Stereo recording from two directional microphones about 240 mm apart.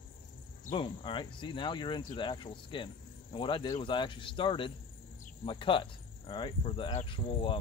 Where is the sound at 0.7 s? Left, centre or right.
Left.